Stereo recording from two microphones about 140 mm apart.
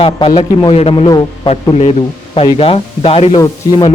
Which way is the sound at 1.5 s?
45° left (ahead or behind).